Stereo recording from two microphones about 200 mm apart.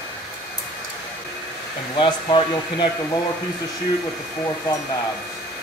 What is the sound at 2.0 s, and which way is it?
Speech, 25° left (ahead or behind).